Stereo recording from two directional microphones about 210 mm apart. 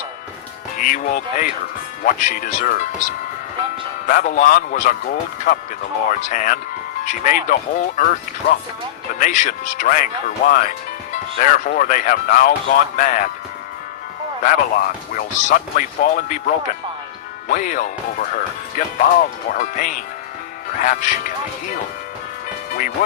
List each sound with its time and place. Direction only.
0.8 s speech: 40° left (ahead or behind)
14.4 s speech: 45° left (ahead or behind)
17.5 s speech: 40° left (ahead or behind)
19.5 s speech: 40° left (ahead or behind)
22.7 s speech: 40° left (ahead or behind)